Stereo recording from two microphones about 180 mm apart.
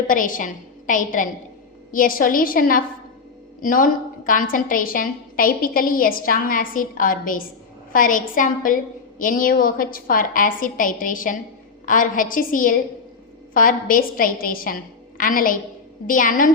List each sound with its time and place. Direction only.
0.1 s a woman's voice: 50° left (ahead or behind)